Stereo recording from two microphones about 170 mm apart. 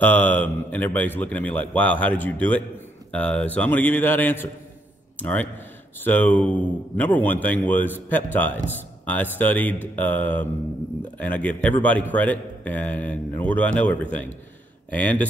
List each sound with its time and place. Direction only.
0.0 s a man's voice: 10° left (ahead or behind)